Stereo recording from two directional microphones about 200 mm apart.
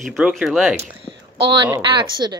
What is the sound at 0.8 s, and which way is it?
A woman's voice, 25° right (ahead or behind).